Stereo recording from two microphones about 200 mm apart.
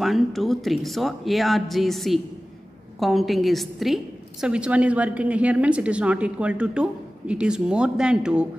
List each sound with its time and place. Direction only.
0.0 s a woman's voice: centre (ahead or behind)